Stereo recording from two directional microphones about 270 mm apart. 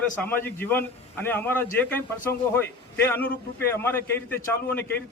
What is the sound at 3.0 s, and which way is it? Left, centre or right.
A man's voice, centre.